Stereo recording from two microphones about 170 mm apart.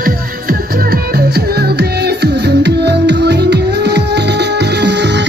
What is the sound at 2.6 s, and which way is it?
Music, 80° right.